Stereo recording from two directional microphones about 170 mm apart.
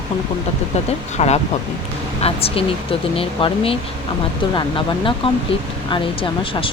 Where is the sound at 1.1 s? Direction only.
40° left (ahead or behind).